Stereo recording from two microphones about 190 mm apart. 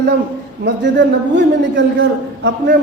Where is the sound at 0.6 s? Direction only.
70° right (ahead or behind).